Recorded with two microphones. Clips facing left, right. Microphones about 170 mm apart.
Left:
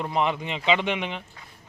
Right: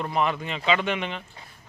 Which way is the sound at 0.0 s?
15° left (ahead or behind).